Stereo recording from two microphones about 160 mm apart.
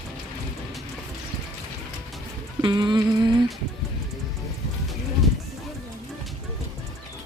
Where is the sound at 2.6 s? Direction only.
30° right (ahead or behind).